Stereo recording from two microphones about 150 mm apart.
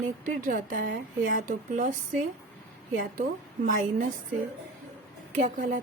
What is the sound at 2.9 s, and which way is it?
A woman's voice, 60° right (ahead or behind).